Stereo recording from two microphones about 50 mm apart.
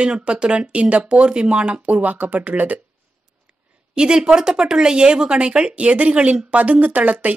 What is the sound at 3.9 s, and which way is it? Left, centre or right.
Speech, centre.